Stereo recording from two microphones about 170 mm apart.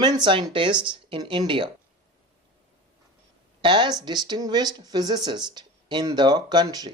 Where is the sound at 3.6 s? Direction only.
25° right (ahead or behind).